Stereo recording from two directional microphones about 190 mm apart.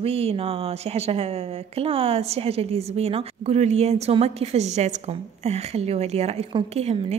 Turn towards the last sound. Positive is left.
turn(degrees=-35)  # may be behind; listen again after turning